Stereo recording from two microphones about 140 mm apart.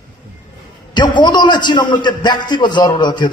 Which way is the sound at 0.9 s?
30° left (ahead or behind).